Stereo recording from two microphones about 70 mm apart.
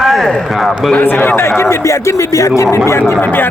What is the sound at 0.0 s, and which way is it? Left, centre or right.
Speech, centre.